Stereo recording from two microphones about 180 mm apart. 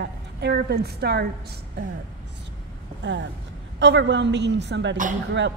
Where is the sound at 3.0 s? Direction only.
85° right.